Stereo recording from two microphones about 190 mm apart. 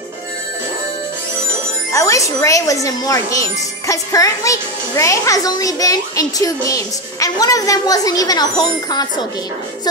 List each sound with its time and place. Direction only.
1.9 s speech: 15° left (ahead or behind)